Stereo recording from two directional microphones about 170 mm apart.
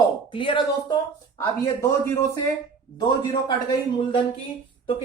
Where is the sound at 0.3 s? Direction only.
30° left (ahead or behind).